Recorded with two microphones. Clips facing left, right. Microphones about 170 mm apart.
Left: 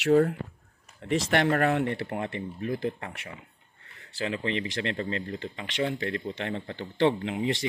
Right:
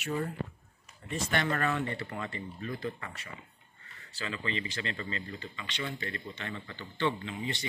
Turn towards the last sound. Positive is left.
turn(degrees=90)